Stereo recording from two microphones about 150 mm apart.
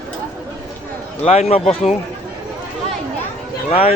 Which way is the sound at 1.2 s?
45° left (ahead or behind).